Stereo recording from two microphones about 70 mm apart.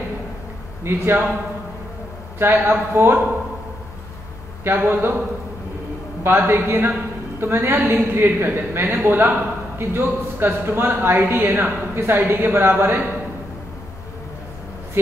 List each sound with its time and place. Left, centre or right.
0.8 s speech: right
2.3 s speech: right
4.6 s speech: right
6.2 s speech: right